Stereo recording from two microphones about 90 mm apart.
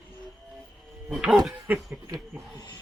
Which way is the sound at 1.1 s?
Centre (ahead or behind).